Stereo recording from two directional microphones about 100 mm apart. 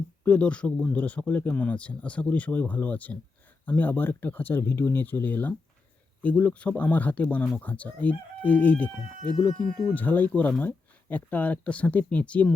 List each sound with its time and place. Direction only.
0.3 s speech: 10° left (ahead or behind)